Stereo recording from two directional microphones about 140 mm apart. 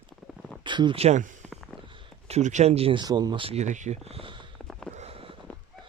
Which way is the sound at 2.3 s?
55° right (ahead or behind).